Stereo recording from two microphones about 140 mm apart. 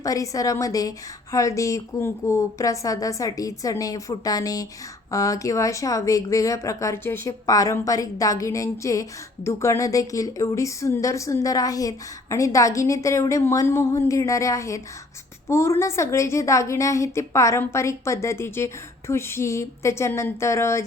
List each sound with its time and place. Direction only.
0.0 s a woman's voice: 25° left (ahead or behind)